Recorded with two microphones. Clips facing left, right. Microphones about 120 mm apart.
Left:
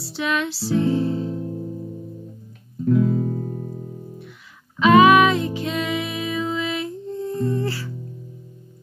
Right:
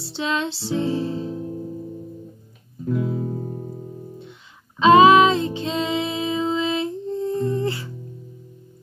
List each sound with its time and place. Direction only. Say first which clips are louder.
0.0 s music: left 1 dB; 25° right (ahead or behind)
1.3 s music: left 1 dB; centre (ahead or behind)
2.9 s music: left 5 dB; 5° right (ahead or behind)
4.7 s music: right 1 dB; 25° right (ahead or behind)